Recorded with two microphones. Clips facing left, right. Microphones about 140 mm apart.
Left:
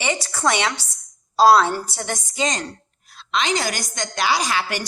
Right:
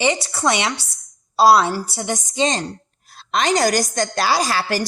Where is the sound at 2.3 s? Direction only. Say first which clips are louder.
Right 4 dB; 30° right (ahead or behind).